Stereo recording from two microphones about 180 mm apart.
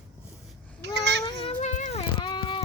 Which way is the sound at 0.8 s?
70° right (ahead or behind).